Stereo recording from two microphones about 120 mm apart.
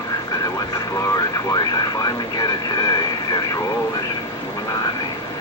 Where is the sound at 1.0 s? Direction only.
30° left (ahead or behind).